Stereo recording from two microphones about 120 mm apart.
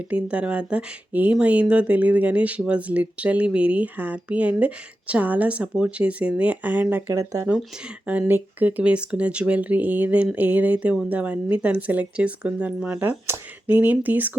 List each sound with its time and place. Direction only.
0.3 s speech: 10° right (ahead or behind)
7.1 s speech: 25° right (ahead or behind)
8.0 s speech: 10° right (ahead or behind)